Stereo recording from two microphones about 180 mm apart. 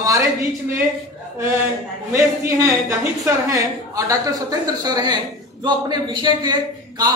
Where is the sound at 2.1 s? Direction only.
15° right (ahead or behind).